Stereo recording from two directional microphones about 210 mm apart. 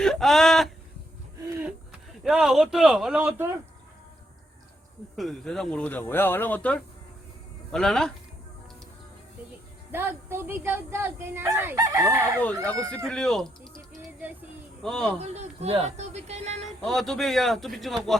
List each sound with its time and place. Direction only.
0.0 s speech: centre (ahead or behind)
5.1 s a man's voice: centre (ahead or behind)
9.9 s speech: 10° right (ahead or behind)
13.1 s a man's voice: centre (ahead or behind)
14.8 s a man's voice: 5° left (ahead or behind)
15.2 s speech: 30° right (ahead or behind)
16.8 s a man's voice: centre (ahead or behind)